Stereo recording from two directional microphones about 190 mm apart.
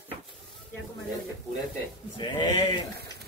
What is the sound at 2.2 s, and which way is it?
Speech, 25° left (ahead or behind).